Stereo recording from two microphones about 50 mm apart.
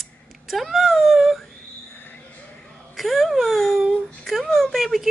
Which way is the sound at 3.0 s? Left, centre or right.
Centre.